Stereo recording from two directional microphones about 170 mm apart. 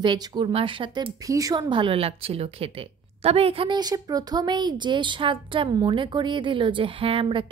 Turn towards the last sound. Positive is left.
turn(degrees=-30)  # may be behind; listen again after turning